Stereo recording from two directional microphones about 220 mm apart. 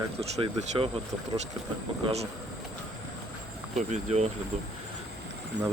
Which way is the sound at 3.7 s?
30° right (ahead or behind).